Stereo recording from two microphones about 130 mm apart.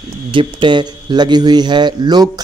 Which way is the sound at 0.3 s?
40° right (ahead or behind).